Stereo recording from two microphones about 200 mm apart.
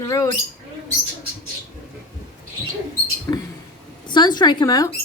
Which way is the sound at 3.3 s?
10° left (ahead or behind).